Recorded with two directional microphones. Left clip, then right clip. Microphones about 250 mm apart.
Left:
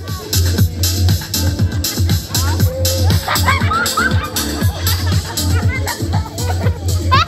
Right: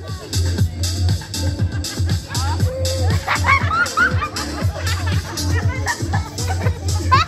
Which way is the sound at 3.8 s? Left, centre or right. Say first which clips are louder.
Even; left.